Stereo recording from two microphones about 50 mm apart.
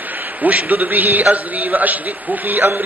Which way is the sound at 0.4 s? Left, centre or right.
Right.